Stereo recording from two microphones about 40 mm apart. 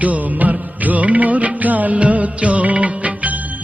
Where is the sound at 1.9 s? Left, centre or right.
Right.